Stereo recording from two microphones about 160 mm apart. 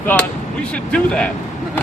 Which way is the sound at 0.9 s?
5° left (ahead or behind).